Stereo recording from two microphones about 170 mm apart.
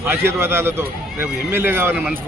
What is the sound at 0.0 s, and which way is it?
A man's voice, 15° right (ahead or behind).